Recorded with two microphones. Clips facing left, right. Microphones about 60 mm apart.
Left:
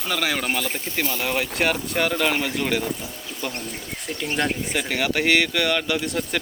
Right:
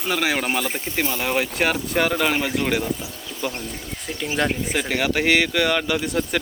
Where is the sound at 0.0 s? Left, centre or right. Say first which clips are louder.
Right 2 dB; centre.